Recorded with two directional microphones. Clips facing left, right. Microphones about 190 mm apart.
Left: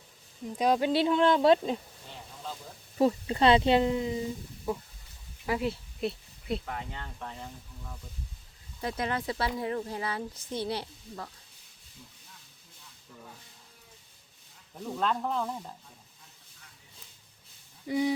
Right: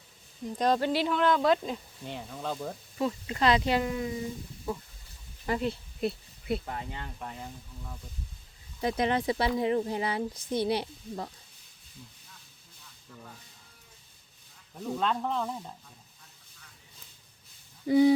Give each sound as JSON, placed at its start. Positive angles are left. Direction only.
{"t": 0.4, "sound": "speech", "side_deg": 10}
{"t": 1.0, "sound": "speech", "side_deg": 25}
{"t": 2.0, "sound": "speech", "side_deg": -65}
{"t": 3.0, "sound": "speech", "side_deg": 35}
{"t": 5.5, "sound": "speech", "side_deg": 5}
{"t": 6.7, "sound": "speech", "side_deg": -20}
{"t": 8.8, "sound": "speech", "side_deg": -20}
{"t": 14.9, "sound": "speech", "side_deg": 0}
{"t": 17.8, "sound": "speech", "side_deg": -30}